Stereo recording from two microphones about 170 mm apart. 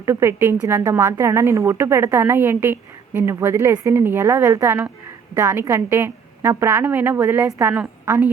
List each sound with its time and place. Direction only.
0.0 s speech: 15° right (ahead or behind)